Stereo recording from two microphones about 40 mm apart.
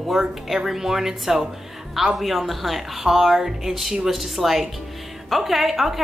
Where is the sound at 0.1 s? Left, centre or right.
Centre.